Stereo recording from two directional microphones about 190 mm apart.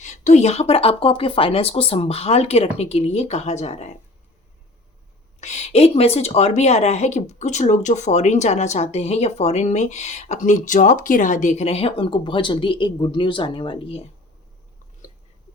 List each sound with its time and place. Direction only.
0.0 s a woman's voice: 40° left (ahead or behind)
5.4 s a woman's voice: 35° left (ahead or behind)